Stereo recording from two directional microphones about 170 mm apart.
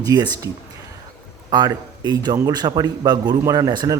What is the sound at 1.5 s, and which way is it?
A man's voice, 25° right (ahead or behind).